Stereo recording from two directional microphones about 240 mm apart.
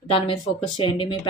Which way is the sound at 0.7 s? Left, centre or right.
Left.